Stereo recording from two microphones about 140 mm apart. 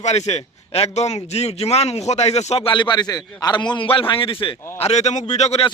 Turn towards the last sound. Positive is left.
turn(degrees=45)  # may be behind; listen again after turning